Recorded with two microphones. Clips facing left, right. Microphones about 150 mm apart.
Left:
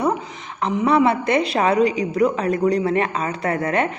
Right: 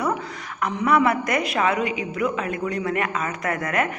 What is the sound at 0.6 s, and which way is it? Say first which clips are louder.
A woman's voice: left 3 dB; 30° left (ahead or behind).